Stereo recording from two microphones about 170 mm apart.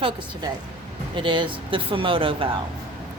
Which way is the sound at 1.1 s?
30° right (ahead or behind).